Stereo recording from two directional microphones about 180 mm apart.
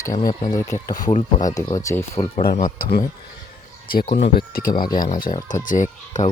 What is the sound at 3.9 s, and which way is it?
Speech, 55° left (ahead or behind).